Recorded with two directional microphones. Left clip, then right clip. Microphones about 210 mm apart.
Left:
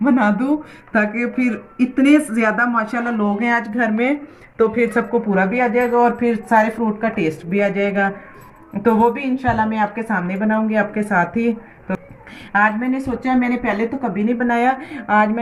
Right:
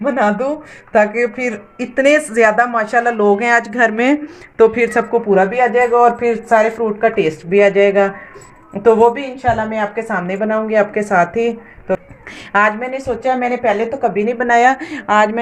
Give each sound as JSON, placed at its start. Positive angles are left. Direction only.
{"t": 0.0, "sound": "speech", "side_deg": -35}